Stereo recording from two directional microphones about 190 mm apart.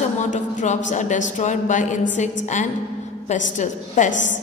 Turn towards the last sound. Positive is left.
turn(degrees=40)  # may be behind; listen again after turning